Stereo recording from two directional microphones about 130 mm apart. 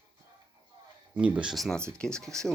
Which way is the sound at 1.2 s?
10° right (ahead or behind).